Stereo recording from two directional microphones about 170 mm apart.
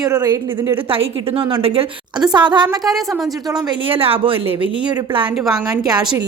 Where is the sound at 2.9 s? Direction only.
Centre (ahead or behind).